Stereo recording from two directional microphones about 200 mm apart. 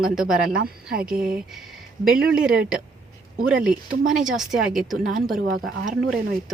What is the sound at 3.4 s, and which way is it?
Speech, 5° right (ahead or behind).